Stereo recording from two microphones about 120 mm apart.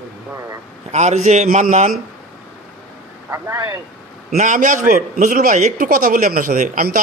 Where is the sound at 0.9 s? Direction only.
70° right (ahead or behind).